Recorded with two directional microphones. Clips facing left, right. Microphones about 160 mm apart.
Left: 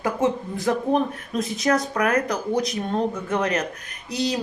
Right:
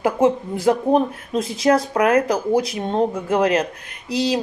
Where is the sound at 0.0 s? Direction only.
30° right (ahead or behind).